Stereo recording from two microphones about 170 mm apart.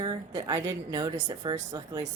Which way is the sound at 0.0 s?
25° right (ahead or behind).